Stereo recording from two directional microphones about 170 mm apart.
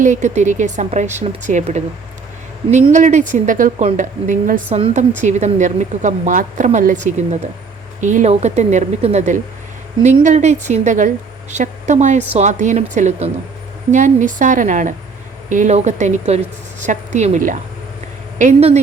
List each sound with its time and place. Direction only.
0.0 s a woman's voice: 45° right (ahead or behind)
2.9 s a woman's voice: 45° right (ahead or behind)